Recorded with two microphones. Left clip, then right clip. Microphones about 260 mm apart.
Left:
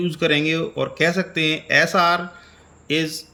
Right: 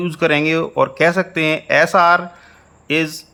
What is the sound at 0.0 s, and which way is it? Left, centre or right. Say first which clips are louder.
Speech: right 4 dB; centre.